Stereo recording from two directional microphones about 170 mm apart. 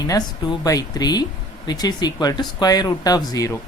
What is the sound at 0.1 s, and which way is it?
Speech, 25° left (ahead or behind).